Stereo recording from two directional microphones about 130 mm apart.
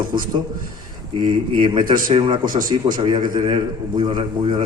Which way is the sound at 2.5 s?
90° right.